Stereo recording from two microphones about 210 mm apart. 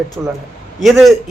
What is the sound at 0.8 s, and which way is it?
Speech, centre (ahead or behind).